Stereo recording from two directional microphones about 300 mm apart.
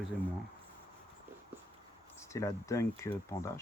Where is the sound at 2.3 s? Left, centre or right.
Centre.